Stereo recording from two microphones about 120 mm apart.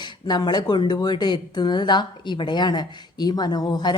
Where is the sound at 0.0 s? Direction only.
35° left (ahead or behind).